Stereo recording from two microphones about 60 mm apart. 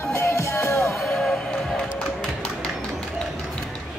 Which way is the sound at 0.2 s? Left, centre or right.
Left.